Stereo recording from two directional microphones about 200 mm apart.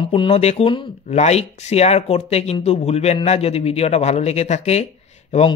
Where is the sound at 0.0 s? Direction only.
25° left (ahead or behind).